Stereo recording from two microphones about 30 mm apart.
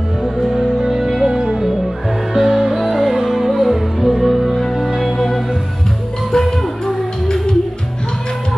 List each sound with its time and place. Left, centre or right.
0.6 s music: centre
1.3 s music: centre
5.1 s music: centre